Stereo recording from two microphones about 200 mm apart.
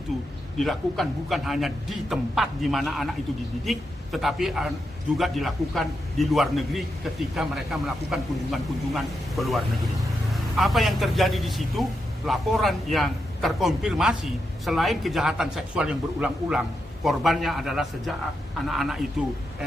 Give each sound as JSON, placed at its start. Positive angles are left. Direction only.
{"t": 0.6, "sound": "a man's voice", "side_deg": 0}